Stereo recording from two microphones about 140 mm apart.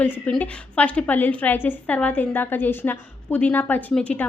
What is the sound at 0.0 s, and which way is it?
A woman's voice, 10° left (ahead or behind).